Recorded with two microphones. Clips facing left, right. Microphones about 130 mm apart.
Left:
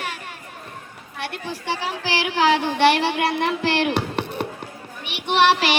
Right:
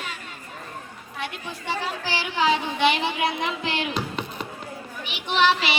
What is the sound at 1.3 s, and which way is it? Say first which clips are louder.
Speech: left 4 dB; 85° left.